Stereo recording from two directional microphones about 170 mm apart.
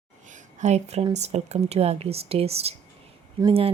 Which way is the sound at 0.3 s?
45° right (ahead or behind).